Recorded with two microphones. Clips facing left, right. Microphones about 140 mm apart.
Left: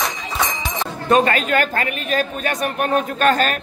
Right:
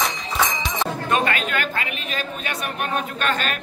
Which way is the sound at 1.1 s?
35° left (ahead or behind).